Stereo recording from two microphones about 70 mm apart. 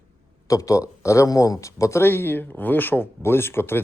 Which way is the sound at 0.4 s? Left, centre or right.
Left.